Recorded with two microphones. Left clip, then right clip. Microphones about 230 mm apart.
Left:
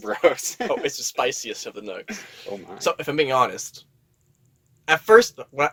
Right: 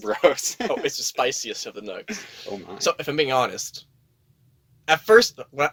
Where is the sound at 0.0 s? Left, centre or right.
Right.